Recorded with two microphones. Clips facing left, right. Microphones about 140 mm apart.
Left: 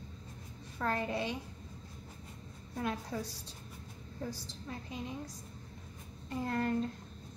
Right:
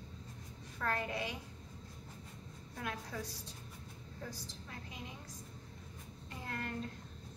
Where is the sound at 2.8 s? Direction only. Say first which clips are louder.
Left 6 dB; 25° left (ahead or behind).